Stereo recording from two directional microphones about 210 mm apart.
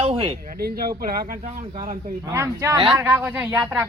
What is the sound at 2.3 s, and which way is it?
Speech, 15° right (ahead or behind).